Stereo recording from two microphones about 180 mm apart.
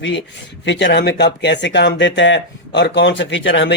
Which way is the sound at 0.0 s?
90° left.